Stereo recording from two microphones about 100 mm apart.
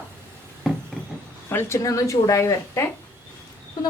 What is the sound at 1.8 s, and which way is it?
Speech, 35° left (ahead or behind).